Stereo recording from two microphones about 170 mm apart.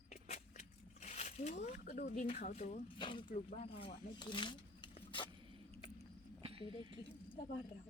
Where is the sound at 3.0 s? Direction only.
30° left (ahead or behind).